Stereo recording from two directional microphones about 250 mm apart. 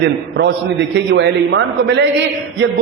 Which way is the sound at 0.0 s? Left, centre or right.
Right.